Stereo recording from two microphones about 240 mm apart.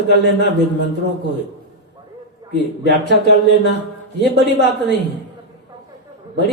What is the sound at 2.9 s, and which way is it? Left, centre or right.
A man's voice, left.